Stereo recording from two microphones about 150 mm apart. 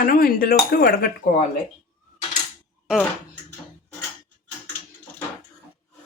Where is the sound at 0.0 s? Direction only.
75° left (ahead or behind); by 1.4 s 90° left.